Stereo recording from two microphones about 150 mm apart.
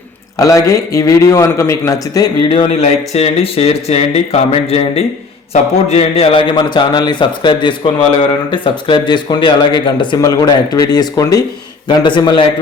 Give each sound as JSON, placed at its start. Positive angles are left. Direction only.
{"t": 0.3, "sound": "speech", "side_deg": 20}
{"t": 2.5, "sound": "speech", "side_deg": 40}